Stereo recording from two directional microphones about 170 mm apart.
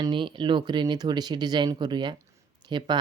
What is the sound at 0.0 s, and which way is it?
Speech, 30° right (ahead or behind).